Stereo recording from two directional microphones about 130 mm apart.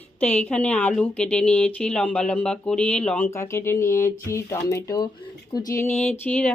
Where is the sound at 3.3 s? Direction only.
20° left (ahead or behind).